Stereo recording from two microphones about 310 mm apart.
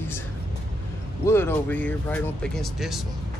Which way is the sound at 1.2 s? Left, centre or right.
Centre.